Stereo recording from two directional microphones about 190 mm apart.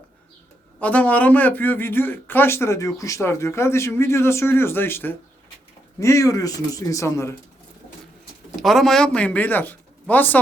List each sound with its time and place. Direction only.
0.8 s a man's voice: 10° left (ahead or behind)
8.5 s speech: centre (ahead or behind)